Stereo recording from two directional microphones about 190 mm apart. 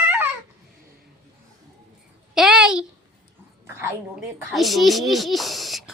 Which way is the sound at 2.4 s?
5° right (ahead or behind).